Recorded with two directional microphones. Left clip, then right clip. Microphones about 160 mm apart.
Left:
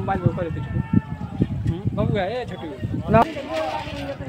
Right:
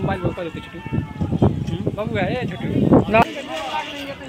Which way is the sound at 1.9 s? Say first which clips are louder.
Even; 25° left (ahead or behind).